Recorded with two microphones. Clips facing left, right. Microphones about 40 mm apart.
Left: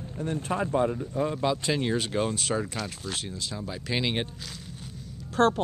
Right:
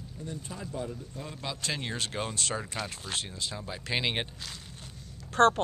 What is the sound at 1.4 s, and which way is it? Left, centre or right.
Speech, centre.